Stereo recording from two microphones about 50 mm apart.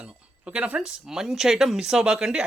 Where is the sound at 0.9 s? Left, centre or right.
Centre.